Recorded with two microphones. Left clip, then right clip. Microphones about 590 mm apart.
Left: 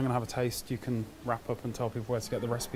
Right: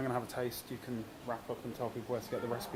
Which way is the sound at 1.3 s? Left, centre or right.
Left.